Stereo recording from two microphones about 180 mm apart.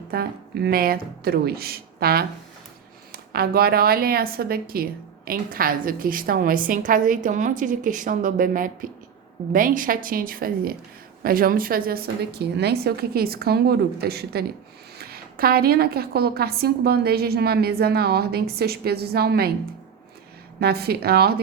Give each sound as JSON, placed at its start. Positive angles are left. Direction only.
{"t": 0.1, "sound": "a woman's voice", "side_deg": -55}
{"t": 20.6, "sound": "a woman's voice", "side_deg": -60}